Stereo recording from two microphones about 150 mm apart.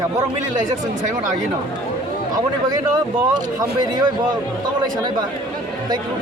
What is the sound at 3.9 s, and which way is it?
Speech, 30° right (ahead or behind).